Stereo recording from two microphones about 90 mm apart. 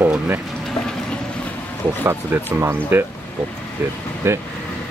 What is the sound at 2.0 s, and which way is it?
Speech, 25° right (ahead or behind).